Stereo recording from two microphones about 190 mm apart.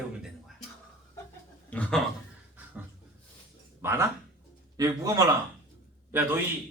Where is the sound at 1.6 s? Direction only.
5° left (ahead or behind).